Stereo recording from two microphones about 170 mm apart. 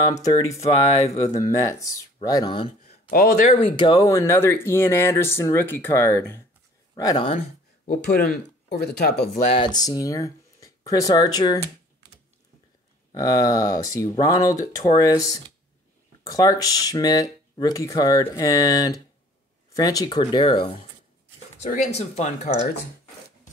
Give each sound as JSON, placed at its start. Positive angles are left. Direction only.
{"t": 0.0, "sound": "speech", "side_deg": 20}
{"t": 0.5, "sound": "speech", "side_deg": 40}
{"t": 1.3, "sound": "speech", "side_deg": 20}
{"t": 3.1, "sound": "speech", "side_deg": 50}
{"t": 3.6, "sound": "speech", "side_deg": 25}
{"t": 7.0, "sound": "speech", "side_deg": 25}
{"t": 7.3, "sound": "speech", "side_deg": 55}
{"t": 9.4, "sound": "speech", "side_deg": 30}
{"t": 13.1, "sound": "speech", "side_deg": 20}
{"t": 21.5, "sound": "speech", "side_deg": 45}